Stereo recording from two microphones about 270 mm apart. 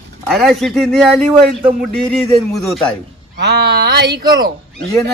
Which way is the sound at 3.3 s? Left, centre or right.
Right.